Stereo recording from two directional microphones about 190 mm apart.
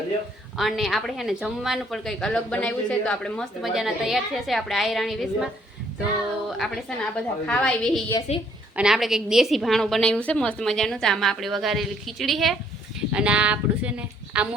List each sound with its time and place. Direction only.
0.5 s a woman's voice: centre (ahead or behind)
6.6 s a woman's voice: 5° left (ahead or behind)
8.3 s a woman's voice: 35° left (ahead or behind)
8.7 s a woman's voice: 5° right (ahead or behind)